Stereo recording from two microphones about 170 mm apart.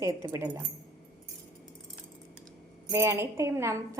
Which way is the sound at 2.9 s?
15° right (ahead or behind).